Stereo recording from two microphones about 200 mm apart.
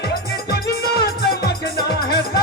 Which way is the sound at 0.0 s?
50° left (ahead or behind).